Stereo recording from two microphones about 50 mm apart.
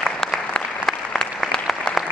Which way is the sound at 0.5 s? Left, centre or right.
Centre.